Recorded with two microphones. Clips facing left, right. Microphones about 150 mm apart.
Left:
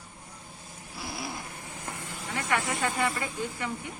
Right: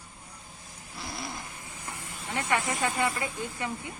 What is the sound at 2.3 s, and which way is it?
Speech, 20° right (ahead or behind).